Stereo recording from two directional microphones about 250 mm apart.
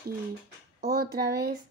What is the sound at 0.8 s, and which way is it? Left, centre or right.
Speech, right.